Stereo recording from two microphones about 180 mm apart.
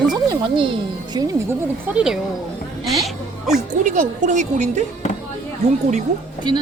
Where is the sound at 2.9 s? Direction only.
Centre (ahead or behind).